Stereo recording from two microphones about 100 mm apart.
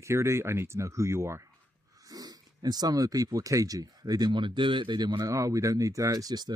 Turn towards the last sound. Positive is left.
turn(degrees=-40)  # may be behind; listen again after turning